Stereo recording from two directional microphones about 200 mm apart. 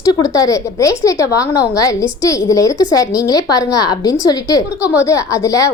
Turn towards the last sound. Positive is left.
turn(degrees=15)  # may be behind; listen again after turning